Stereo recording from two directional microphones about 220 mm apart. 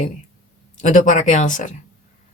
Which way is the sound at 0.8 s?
35° left (ahead or behind).